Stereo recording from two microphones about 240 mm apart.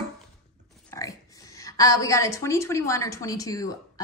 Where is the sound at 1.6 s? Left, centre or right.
Centre.